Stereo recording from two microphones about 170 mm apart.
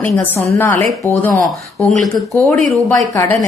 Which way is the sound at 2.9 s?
20° left (ahead or behind).